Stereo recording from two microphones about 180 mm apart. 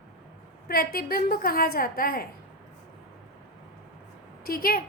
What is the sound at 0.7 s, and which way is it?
A woman's voice, 55° left (ahead or behind).